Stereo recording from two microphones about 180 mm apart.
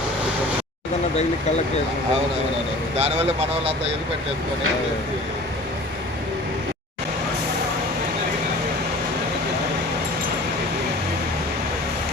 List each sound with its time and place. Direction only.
3.0 s speech: 35° right (ahead or behind)